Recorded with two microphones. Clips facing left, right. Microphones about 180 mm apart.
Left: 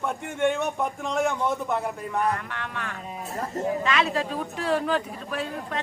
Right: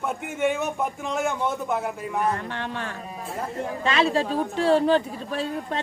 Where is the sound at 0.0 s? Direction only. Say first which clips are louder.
Even; 5° right (ahead or behind).